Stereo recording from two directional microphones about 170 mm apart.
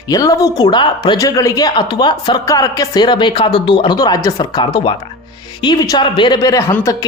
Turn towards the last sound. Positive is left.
turn(degrees=15)  # may be behind; listen again after turning